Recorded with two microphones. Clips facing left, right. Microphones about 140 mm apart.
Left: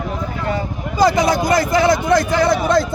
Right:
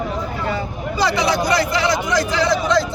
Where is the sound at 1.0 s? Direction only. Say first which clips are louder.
Left 4 dB; 45° left (ahead or behind).